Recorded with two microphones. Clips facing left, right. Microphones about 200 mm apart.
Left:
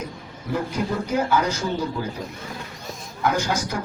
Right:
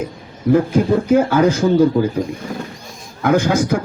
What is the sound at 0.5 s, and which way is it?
A man's voice, 55° right (ahead or behind).